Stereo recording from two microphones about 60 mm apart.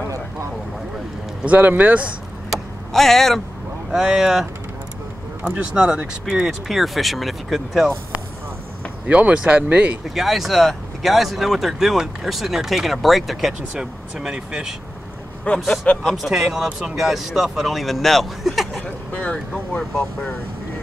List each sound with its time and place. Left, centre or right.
1.4 s speech: right
2.9 s speech: centre
3.9 s speech: centre
5.4 s speech: centre
6.7 s speech: centre
9.0 s speech: right
10.0 s speech: centre
13.7 s speech: centre
15.5 s speech: left
16.3 s speech: centre
18.8 s vehicle: left
19.8 s speech: centre